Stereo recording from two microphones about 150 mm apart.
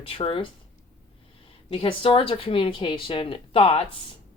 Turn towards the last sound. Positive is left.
turn(degrees=40)  # may be behind; listen again after turning